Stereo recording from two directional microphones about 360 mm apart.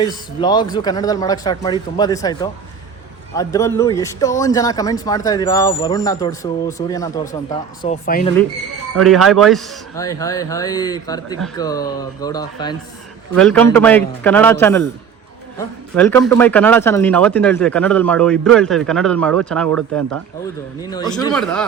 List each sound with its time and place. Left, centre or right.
0.3 s a man's voice: centre
7.8 s a man's voice: left
9.0 s a man's voice: centre
20.9 s a man's voice: centre